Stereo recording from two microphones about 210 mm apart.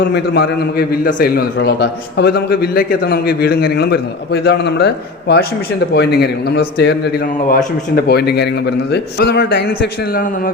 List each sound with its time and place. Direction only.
0.1 s a man's voice: 50° left (ahead or behind)
5.9 s a man's voice: 50° left (ahead or behind)